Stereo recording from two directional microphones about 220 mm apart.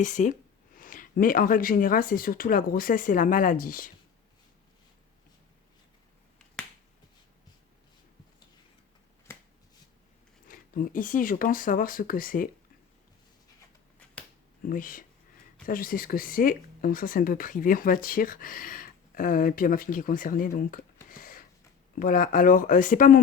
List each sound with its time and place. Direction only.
0.0 s speech: 35° left (ahead or behind)
10.4 s speech: 40° left (ahead or behind)
14.6 s speech: 40° left (ahead or behind)